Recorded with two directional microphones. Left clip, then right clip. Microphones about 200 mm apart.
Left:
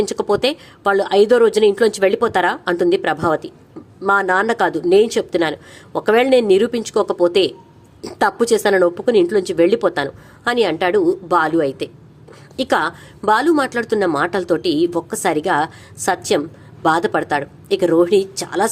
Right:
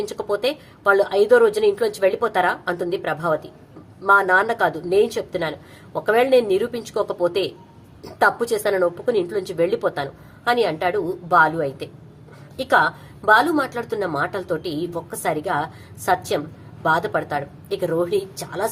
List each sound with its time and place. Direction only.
0.0 s speech: 45° left (ahead or behind)